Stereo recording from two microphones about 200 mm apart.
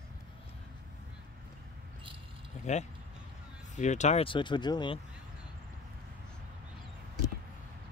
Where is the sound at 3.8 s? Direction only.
35° left (ahead or behind).